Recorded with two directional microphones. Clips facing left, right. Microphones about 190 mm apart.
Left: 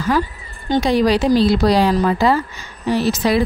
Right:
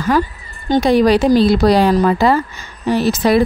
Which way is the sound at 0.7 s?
50° right (ahead or behind).